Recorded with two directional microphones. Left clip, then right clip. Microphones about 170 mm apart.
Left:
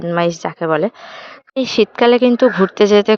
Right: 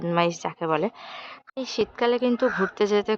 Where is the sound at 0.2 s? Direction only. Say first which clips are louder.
Left 7 dB; 25° left (ahead or behind).